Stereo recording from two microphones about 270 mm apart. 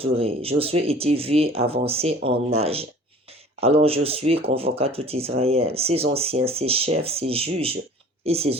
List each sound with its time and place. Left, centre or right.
0.0 s speech: right